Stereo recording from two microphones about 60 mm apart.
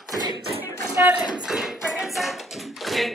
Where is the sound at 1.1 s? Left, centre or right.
Centre.